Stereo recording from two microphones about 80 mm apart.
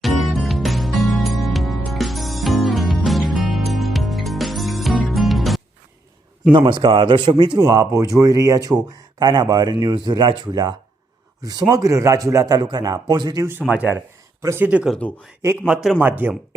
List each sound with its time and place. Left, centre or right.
0.0 s music: centre
6.5 s a man's voice: right
7.6 s speech: right
9.1 s speech: right
11.4 s speech: right
12.5 s speech: right
13.4 s speech: right
13.7 s speech: centre
16.0 s speech: right